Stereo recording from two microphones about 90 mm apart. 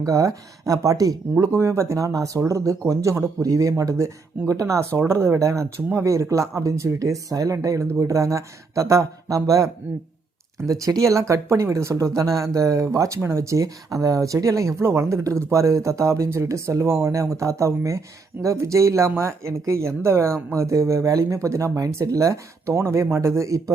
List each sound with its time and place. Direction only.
0.0 s speech: 40° right (ahead or behind)
10.7 s speech: 35° right (ahead or behind)